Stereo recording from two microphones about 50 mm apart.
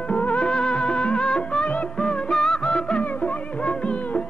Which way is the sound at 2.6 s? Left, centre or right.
Left.